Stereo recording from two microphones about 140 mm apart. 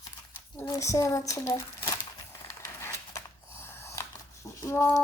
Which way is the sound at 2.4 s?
20° left (ahead or behind).